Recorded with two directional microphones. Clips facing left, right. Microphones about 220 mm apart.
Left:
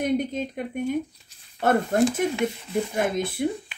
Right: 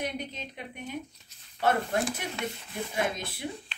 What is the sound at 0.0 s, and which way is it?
Speech, 50° left (ahead or behind).